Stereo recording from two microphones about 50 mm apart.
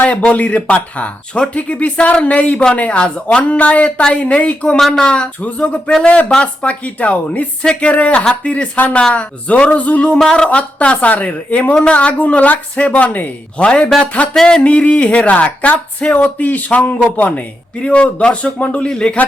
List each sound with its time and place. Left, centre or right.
0.0 s a woman's voice: left
4.8 s speech: centre
5.0 s a woman's voice: centre
5.4 s a woman's voice: left
10.2 s speech: centre
10.6 s a woman's voice: left
13.7 s a woman's voice: centre
14.3 s speech: centre
14.6 s a woman's voice: left
17.8 s a woman's voice: left
18.9 s a woman's voice: centre